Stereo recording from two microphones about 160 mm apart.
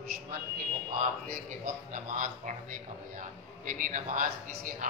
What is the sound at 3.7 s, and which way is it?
Speech, 55° right (ahead or behind).